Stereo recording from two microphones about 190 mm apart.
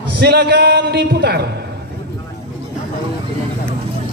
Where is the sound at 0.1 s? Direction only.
60° right (ahead or behind).